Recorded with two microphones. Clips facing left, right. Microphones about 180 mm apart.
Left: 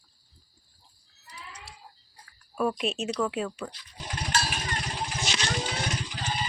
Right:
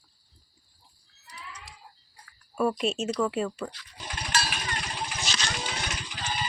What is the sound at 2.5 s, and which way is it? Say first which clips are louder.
Speech: right 2 dB; centre (ahead or behind).